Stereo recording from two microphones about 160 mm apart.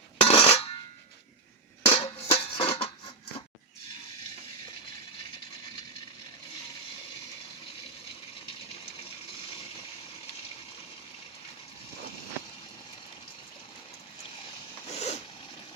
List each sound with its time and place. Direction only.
0.2 s cutlery: 35° left (ahead or behind)
1.8 s music: 40° left (ahead or behind)
14.8 s zipper: 40° left (ahead or behind)